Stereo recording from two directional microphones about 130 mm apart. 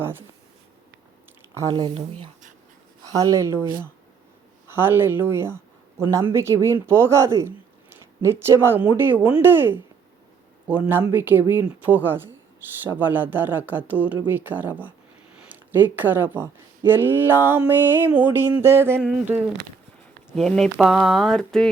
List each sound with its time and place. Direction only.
0.0 s speech: 15° right (ahead or behind)
2.0 s speech: 50° right (ahead or behind)
3.0 s speech: 25° right (ahead or behind)
4.7 s speech: 15° right (ahead or behind)
20.3 s speech: 5° left (ahead or behind)
20.7 s speech: 10° right (ahead or behind)